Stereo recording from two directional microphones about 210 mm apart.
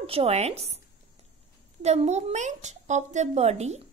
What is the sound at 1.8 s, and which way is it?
Speech, 30° right (ahead or behind).